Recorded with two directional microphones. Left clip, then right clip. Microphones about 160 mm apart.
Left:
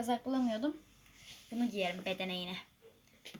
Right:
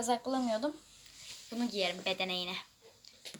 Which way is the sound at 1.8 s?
15° left (ahead or behind).